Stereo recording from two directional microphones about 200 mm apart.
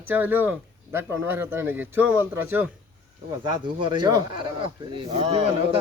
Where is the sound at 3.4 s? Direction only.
25° right (ahead or behind).